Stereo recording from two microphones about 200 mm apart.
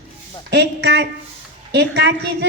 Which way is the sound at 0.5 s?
60° right (ahead or behind).